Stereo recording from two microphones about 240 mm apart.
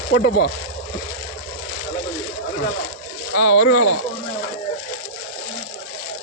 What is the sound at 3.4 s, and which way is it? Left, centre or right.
Speech, left.